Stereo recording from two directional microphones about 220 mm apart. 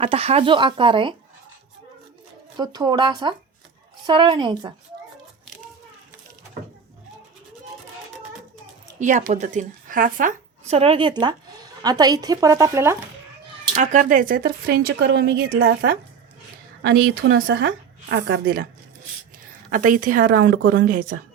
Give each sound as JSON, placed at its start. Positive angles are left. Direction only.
{"t": 0.0, "sound": "speech", "side_deg": -25}
{"t": 2.6, "sound": "speech", "side_deg": -20}
{"t": 9.0, "sound": "a woman's voice", "side_deg": -35}
{"t": 13.7, "sound": "speech", "side_deg": -35}
{"t": 16.8, "sound": "a woman's voice", "side_deg": -45}
{"t": 19.7, "sound": "speech", "side_deg": -35}